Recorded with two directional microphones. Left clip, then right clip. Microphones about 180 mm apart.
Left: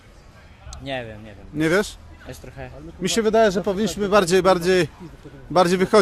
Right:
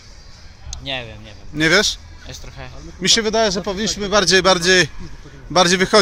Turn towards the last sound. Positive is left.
turn(degrees=5)  # may be behind; listen again after turning